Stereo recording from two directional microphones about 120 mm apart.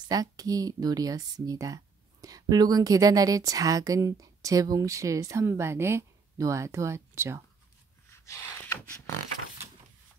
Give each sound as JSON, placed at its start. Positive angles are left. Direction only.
{"t": 0.0, "sound": "a woman's voice", "side_deg": -30}
{"t": 8.1, "sound": "beatboxing", "side_deg": 25}